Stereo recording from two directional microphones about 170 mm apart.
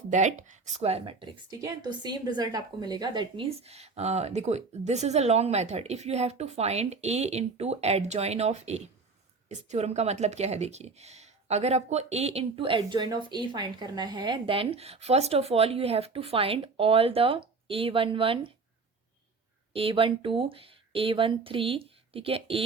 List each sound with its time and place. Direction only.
0.1 s speech: 45° right (ahead or behind)
1.5 s speech: 20° right (ahead or behind)
19.7 s speech: 30° right (ahead or behind)